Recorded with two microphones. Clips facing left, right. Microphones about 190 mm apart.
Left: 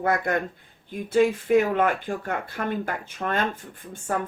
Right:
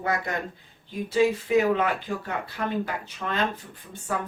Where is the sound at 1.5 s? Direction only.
50° left (ahead or behind).